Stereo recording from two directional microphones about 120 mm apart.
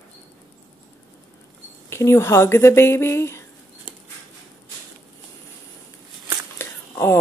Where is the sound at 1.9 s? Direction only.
25° left (ahead or behind).